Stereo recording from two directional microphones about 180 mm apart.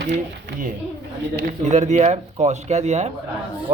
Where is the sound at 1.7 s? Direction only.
40° right (ahead or behind).